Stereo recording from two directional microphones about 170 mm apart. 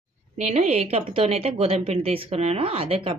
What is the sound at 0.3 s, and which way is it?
Speech, 45° right (ahead or behind).